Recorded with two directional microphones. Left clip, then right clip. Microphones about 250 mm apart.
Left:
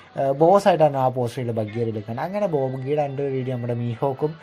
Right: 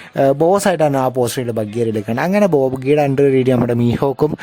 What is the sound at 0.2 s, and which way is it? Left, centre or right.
Speech, right.